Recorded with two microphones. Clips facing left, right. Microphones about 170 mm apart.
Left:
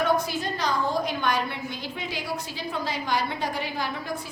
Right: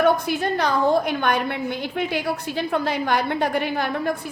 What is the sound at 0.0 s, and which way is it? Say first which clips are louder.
A woman's voice: right 5 dB; 60° right (ahead or behind).